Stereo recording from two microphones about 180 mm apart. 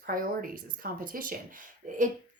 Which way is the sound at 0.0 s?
50° right (ahead or behind).